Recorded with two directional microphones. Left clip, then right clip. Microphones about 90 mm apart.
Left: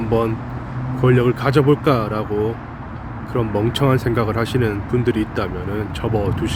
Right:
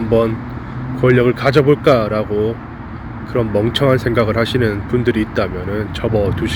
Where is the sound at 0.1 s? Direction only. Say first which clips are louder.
Right 5 dB; 25° left (ahead or behind).